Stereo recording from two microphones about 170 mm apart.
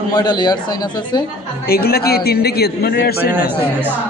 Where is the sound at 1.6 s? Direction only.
65° left (ahead or behind).